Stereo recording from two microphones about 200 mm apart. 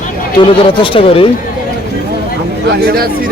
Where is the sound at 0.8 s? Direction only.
25° left (ahead or behind).